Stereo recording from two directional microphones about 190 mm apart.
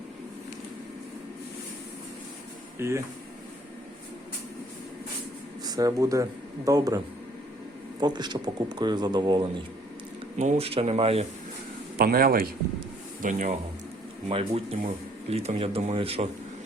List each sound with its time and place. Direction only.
2.7 s speech: 15° right (ahead or behind)
5.6 s speech: 20° right (ahead or behind)
8.0 s speech: 20° right (ahead or behind)
10.3 s speech: 35° right (ahead or behind)
11.9 s a man's voice: 50° right (ahead or behind)
14.3 s speech: 30° right (ahead or behind)